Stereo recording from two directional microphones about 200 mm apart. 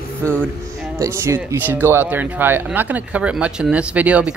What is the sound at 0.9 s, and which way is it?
Speech, 15° right (ahead or behind).